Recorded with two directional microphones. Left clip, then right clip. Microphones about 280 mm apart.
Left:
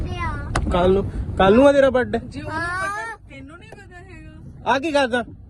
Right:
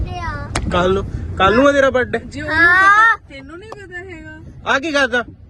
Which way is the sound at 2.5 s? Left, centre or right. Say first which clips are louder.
Right 15 dB; right.